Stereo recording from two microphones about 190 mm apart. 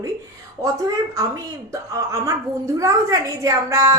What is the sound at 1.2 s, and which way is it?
A woman's voice, 20° right (ahead or behind).